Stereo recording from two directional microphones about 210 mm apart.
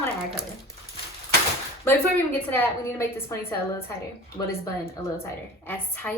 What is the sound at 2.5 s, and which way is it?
A woman's voice, 10° left (ahead or behind).